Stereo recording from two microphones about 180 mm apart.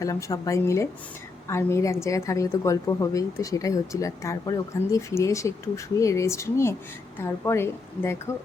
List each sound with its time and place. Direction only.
0.0 s a woman's voice: 20° left (ahead or behind)